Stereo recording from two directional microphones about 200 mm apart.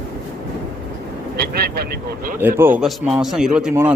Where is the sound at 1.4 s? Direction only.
50° right (ahead or behind).